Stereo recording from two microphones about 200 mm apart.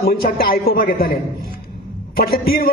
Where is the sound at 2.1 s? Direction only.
50° left (ahead or behind).